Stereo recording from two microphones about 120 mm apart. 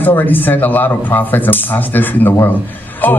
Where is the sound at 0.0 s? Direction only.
15° left (ahead or behind).